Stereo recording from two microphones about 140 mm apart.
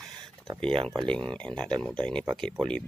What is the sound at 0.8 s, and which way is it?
Speech, 5° left (ahead or behind).